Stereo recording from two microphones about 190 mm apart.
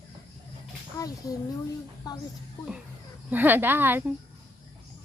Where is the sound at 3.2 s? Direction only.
10° right (ahead or behind).